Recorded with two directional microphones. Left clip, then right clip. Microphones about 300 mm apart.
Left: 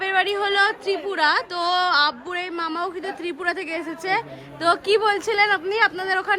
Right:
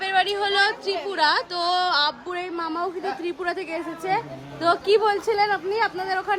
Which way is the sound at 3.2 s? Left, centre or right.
Left.